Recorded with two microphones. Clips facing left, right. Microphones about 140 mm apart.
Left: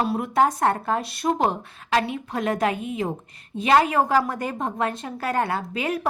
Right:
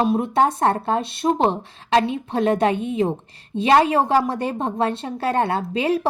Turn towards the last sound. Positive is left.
turn(degrees=-30)  # may be behind; listen again after turning